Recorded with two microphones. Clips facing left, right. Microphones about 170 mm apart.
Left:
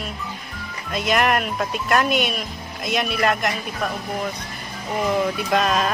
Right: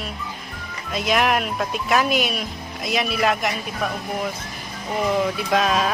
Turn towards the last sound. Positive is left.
turn(degrees=0)  # may be behind; listen again after turning